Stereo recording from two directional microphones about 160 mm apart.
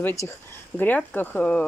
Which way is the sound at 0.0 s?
20° left (ahead or behind).